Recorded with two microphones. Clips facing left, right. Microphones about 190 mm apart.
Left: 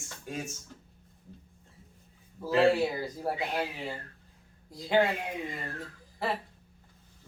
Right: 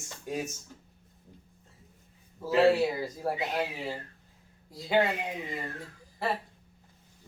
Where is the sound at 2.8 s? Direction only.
Centre (ahead or behind).